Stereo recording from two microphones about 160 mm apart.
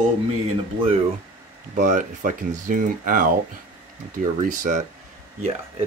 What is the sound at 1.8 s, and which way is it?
Speech, 55° right (ahead or behind).